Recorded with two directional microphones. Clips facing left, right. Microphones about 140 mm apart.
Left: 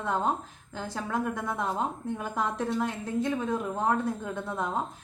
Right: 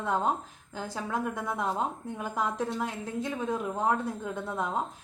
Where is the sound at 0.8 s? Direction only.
10° right (ahead or behind).